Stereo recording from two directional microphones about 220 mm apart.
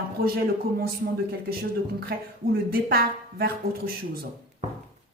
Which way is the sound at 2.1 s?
45° right (ahead or behind).